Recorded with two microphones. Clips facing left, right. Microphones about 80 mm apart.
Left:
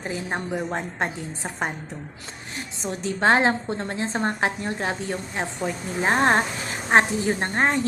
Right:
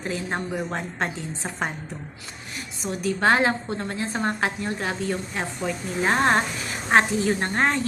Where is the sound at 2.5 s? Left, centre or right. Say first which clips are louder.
Even; left.